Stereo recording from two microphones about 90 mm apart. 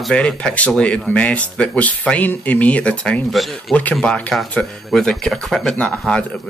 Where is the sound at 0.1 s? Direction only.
10° left (ahead or behind).